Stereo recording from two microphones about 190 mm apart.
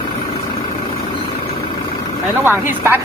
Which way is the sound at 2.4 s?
10° right (ahead or behind).